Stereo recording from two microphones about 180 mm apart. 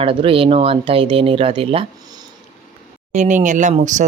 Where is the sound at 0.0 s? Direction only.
30° right (ahead or behind).